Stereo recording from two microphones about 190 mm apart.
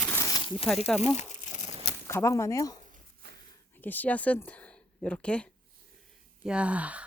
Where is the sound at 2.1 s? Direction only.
15° left (ahead or behind).